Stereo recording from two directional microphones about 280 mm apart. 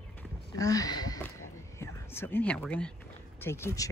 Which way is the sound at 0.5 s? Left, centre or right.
Centre.